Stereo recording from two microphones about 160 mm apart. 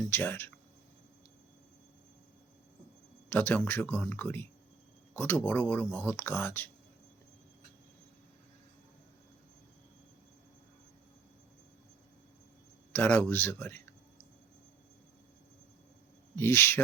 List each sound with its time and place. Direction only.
0.1 s speech: 15° left (ahead or behind)
3.3 s speech: 10° left (ahead or behind)
12.9 s speech: 15° left (ahead or behind)
16.3 s speech: 15° left (ahead or behind)